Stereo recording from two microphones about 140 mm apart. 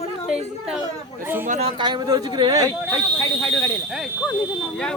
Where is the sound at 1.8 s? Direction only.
35° right (ahead or behind).